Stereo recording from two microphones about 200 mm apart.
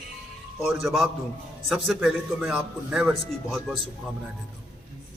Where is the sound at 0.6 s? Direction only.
Centre (ahead or behind).